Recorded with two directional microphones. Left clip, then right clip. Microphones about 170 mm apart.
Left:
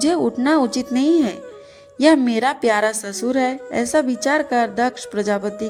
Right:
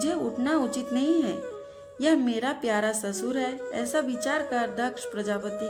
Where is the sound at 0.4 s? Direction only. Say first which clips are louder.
Left 7 dB; 40° left (ahead or behind).